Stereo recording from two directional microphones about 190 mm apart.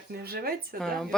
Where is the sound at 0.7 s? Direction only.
Centre (ahead or behind).